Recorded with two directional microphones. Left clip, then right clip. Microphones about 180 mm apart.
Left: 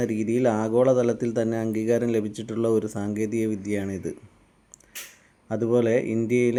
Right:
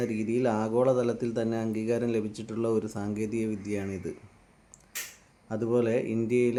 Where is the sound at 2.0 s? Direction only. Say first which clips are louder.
Left 4 dB; 20° left (ahead or behind).